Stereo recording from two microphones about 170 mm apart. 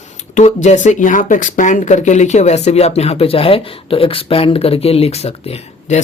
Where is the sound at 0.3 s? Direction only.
45° left (ahead or behind).